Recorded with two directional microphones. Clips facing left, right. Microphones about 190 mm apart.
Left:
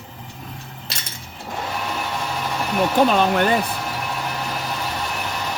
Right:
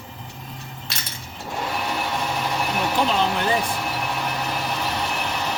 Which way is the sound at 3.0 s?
55° left (ahead or behind).